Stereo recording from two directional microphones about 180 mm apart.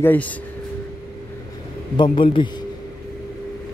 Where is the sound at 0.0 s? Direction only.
10° left (ahead or behind).